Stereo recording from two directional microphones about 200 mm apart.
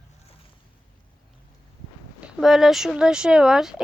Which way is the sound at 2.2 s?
Centre (ahead or behind).